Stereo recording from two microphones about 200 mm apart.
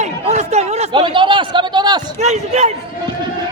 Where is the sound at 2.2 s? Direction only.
35° right (ahead or behind).